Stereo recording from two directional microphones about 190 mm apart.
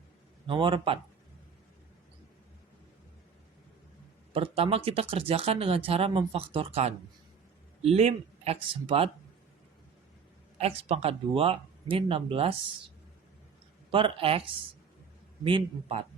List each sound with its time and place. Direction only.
0.4 s speech: 25° right (ahead or behind)
4.3 s a man's voice: 30° right (ahead or behind)
10.6 s speech: 35° right (ahead or behind)
13.9 s speech: 30° right (ahead or behind)